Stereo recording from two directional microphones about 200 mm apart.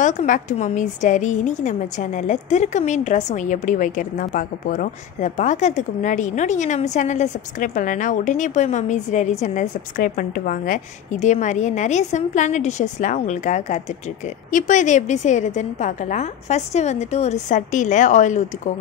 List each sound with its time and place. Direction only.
0.0 s a woman's voice: 40° left (ahead or behind)